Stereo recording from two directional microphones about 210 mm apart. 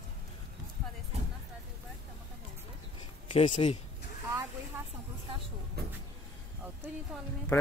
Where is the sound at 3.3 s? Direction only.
25° left (ahead or behind).